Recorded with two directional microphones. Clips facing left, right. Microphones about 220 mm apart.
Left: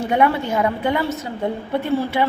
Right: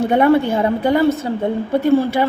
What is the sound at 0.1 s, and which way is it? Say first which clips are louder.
A woman's voice: right 4 dB; 30° right (ahead or behind).